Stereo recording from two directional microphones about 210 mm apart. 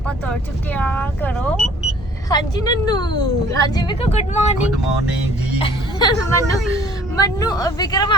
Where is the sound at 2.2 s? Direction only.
20° left (ahead or behind).